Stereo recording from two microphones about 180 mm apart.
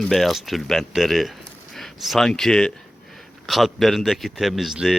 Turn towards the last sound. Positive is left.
turn(degrees=0)  # may be behind; listen again after turning